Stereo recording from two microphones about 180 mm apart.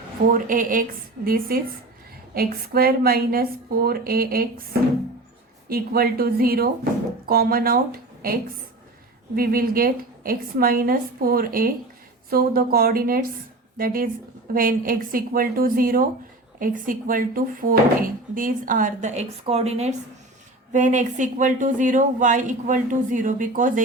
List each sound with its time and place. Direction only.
0.3 s a woman's voice: 50° right (ahead or behind)
5.6 s a woman's voice: 55° right (ahead or behind)